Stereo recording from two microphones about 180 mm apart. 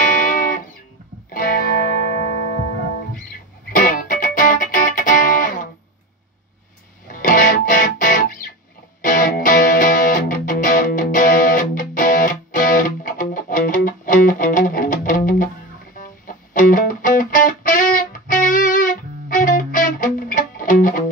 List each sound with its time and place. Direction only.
0.2 s music: 50° left (ahead or behind)
3.7 s music: 50° left (ahead or behind)
7.1 s music: 50° left (ahead or behind)